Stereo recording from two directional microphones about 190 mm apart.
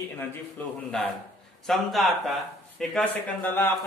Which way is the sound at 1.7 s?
Centre (ahead or behind).